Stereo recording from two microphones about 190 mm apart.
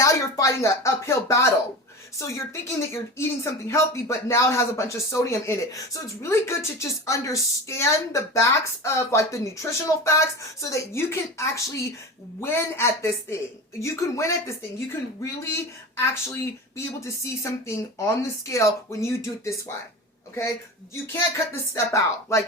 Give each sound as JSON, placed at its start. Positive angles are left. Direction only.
{"t": 0.0, "sound": "speech", "side_deg": 15}
{"t": 20.9, "sound": "speech", "side_deg": 15}